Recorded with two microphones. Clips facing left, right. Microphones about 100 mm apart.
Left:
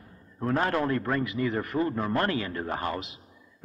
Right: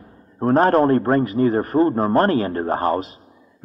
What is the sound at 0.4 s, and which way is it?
A man's voice, 40° right (ahead or behind).